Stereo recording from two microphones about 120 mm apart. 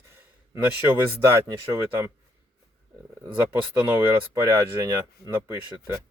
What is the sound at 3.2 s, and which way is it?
Speech, 10° right (ahead or behind).